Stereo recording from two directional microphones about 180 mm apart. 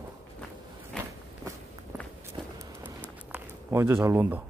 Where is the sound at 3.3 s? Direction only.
15° right (ahead or behind).